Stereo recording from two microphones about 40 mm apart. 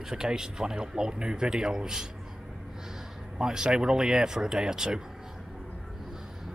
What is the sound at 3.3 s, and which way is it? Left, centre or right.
Speech, centre.